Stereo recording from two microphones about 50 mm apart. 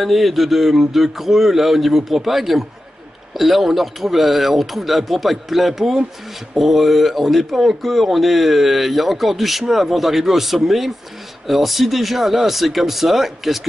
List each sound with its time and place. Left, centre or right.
0.0 s speech: centre